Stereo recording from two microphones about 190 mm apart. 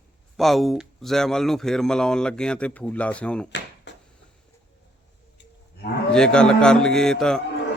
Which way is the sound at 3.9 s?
70° left (ahead or behind).